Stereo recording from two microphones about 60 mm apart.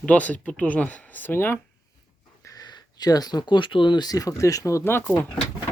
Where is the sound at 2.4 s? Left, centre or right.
Left.